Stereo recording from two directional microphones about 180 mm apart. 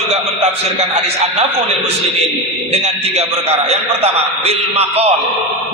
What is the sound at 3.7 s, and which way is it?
A man's voice, 35° right (ahead or behind).